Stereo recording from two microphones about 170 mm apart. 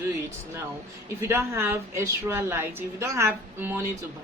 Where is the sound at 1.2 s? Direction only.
15° right (ahead or behind).